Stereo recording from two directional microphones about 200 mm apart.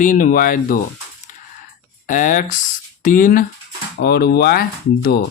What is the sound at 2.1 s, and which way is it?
Speech, 40° left (ahead or behind).